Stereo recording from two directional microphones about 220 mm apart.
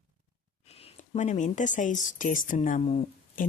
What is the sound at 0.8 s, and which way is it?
A woman's voice, 30° left (ahead or behind).